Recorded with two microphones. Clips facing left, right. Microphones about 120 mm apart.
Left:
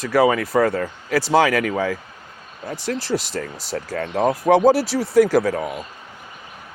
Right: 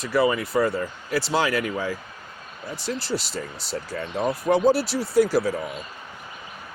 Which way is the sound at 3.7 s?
90° left.